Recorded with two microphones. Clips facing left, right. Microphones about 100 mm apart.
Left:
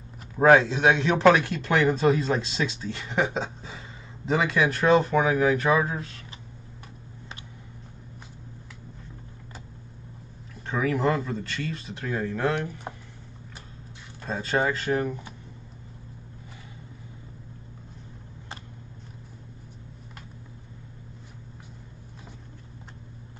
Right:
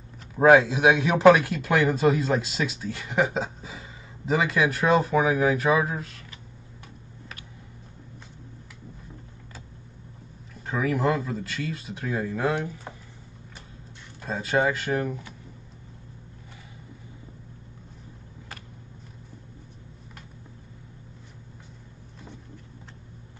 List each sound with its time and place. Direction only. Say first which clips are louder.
0.4 s speech: right 1 dB; 5° right (ahead or behind)
10.7 s speech: even; centre (ahead or behind)
12.6 s speech: left 1 dB; 15° left (ahead or behind)
14.2 s speech: right 1 dB; 5° right (ahead or behind)